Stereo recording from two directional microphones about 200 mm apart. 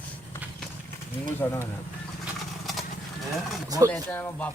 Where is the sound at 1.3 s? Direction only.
10° left (ahead or behind).